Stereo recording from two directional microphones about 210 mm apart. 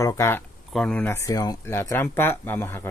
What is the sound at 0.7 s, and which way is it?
Speech, 5° left (ahead or behind).